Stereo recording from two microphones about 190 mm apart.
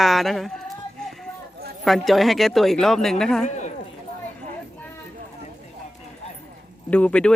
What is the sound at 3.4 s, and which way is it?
Clip-clop, 40° left (ahead or behind).